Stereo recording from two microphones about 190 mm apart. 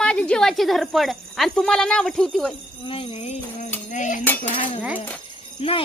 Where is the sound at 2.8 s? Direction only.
25° left (ahead or behind).